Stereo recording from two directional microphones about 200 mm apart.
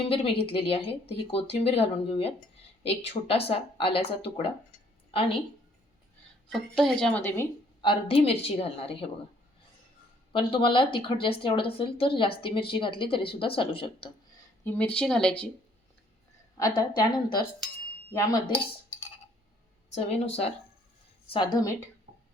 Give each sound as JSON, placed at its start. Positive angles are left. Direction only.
{"t": 0.0, "sound": "speech", "side_deg": 30}
{"t": 6.5, "sound": "speech", "side_deg": 0}
{"t": 7.8, "sound": "speech", "side_deg": 25}
{"t": 10.3, "sound": "speech", "side_deg": 25}
{"t": 14.6, "sound": "speech", "side_deg": 10}
{"t": 16.6, "sound": "speech", "side_deg": 20}
{"t": 18.1, "sound": "dishes", "side_deg": 15}
{"t": 19.9, "sound": "speech", "side_deg": 30}